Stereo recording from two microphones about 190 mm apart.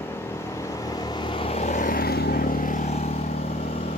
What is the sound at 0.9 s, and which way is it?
Vehicle, 20° left (ahead or behind).